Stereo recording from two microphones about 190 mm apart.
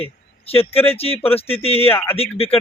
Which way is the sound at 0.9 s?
30° left (ahead or behind).